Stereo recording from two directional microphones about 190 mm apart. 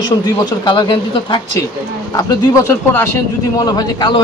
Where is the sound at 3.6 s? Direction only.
20° left (ahead or behind).